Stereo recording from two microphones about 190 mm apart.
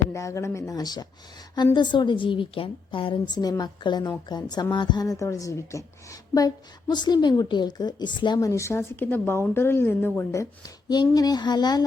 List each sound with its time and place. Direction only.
0.1 s speech: 15° left (ahead or behind)